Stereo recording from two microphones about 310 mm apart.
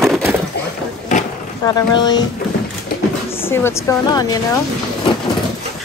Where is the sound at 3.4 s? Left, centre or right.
Centre.